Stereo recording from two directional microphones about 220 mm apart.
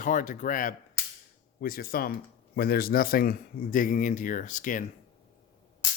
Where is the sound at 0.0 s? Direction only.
35° left (ahead or behind).